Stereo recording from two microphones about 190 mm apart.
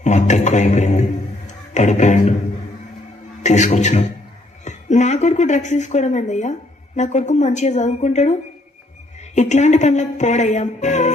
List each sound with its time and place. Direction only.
0.0 s a woman's voice: 40° left (ahead or behind)
1.5 s music: 40° left (ahead or behind)
3.4 s a woman's voice: 40° left (ahead or behind)